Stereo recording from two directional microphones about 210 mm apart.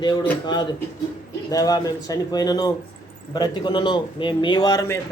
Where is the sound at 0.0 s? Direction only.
20° left (ahead or behind).